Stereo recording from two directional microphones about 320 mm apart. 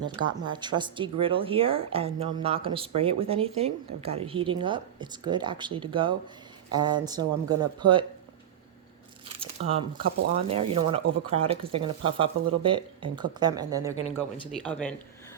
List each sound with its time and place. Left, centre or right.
0.0 s speech: centre
9.4 s speech: centre
14.5 s speech: centre